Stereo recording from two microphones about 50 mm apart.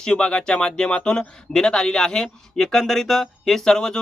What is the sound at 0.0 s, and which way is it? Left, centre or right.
Speech, centre.